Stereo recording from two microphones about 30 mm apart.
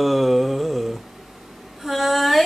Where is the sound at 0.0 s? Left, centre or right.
Centre.